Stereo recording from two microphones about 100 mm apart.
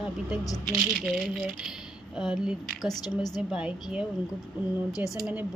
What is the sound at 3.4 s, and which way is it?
Speech, 5° right (ahead or behind).